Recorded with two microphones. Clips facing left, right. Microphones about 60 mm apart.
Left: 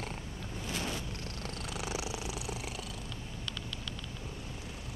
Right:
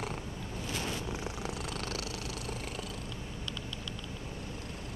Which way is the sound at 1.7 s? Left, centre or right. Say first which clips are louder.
Left 1 dB; centre.